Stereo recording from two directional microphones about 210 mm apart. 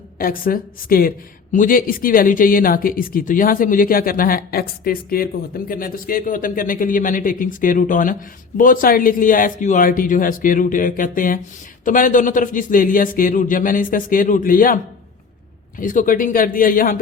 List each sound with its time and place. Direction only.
0.2 s a man's voice: 45° left (ahead or behind)
15.8 s a man's voice: 40° left (ahead or behind)